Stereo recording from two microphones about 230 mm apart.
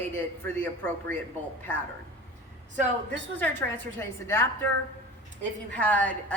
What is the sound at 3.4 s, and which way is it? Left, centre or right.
Speech, centre.